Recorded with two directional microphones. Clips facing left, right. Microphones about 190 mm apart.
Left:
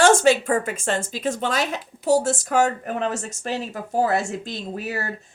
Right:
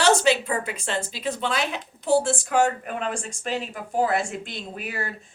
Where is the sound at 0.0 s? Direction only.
45° left (ahead or behind).